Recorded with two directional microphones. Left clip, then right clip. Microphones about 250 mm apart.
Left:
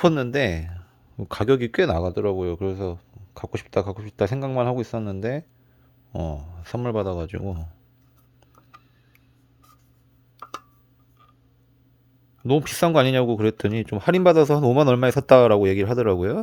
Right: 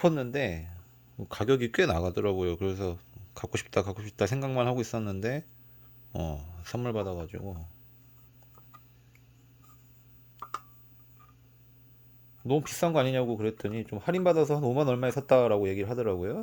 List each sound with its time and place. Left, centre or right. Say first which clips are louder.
0.0 s speech: left 7 dB; left
12.5 s speech: left 8 dB; left